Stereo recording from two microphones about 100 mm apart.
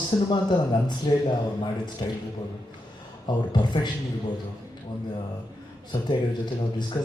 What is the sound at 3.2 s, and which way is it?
Speech, 50° left (ahead or behind).